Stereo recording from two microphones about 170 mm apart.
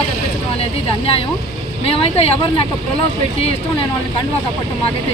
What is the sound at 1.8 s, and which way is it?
Speech, 35° left (ahead or behind).